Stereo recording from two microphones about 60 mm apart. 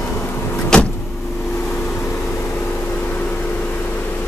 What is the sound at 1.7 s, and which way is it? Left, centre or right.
Vehicle, left.